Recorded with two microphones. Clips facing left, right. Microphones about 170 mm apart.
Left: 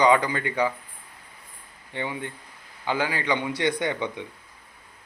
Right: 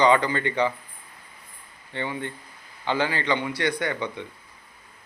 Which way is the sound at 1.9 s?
10° left (ahead or behind).